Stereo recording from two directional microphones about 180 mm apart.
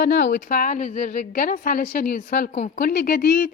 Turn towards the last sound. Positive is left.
turn(degrees=60)  # may be behind; listen again after turning